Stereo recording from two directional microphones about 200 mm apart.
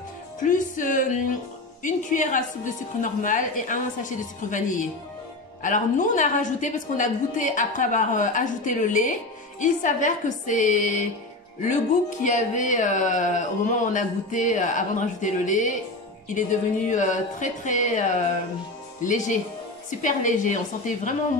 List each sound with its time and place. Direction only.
0.4 s a woman's voice: 40° left (ahead or behind)
12.2 s a woman's voice: 40° left (ahead or behind)